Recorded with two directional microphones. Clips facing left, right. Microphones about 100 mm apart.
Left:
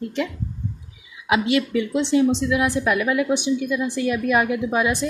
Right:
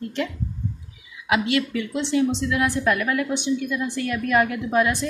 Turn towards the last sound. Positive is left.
turn(degrees=15)  # may be behind; listen again after turning